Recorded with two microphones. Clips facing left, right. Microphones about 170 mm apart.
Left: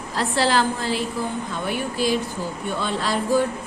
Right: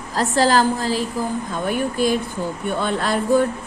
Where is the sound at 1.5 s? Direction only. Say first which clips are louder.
Right 4 dB; 50° right (ahead or behind).